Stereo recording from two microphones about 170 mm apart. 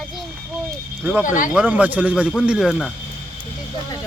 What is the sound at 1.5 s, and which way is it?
Speech, 10° right (ahead or behind).